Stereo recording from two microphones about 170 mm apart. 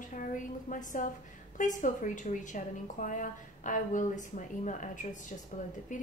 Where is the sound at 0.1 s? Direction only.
50° left (ahead or behind).